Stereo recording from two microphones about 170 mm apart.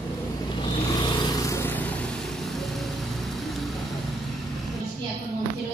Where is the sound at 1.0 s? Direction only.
25° left (ahead or behind).